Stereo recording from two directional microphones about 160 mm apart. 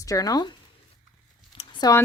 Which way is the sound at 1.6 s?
30° left (ahead or behind).